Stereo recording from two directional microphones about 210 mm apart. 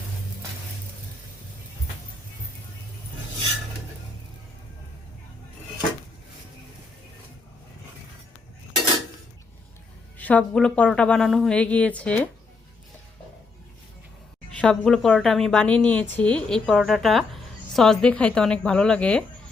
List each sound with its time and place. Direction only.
10.2 s a woman's voice: 5° left (ahead or behind)
14.6 s a woman's voice: 5° left (ahead or behind)